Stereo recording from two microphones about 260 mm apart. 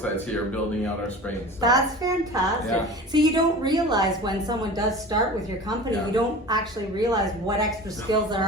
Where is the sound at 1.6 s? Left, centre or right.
Centre.